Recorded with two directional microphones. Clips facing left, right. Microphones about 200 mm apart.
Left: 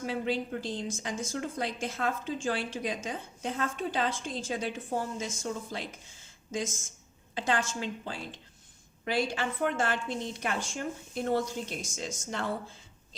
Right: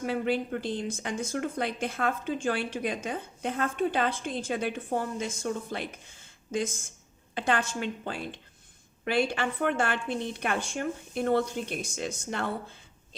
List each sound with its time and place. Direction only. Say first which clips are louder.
0.0 s a woman's voice: right 3 dB; 60° right (ahead or behind)